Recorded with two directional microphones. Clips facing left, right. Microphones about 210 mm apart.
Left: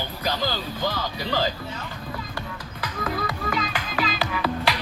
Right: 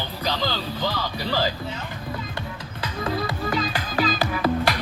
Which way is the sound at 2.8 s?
30° right (ahead or behind).